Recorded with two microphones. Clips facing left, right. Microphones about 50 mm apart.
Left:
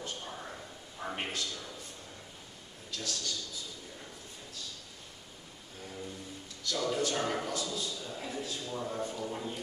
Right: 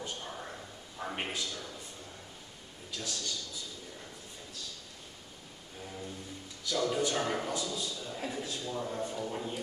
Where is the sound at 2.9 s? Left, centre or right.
Centre.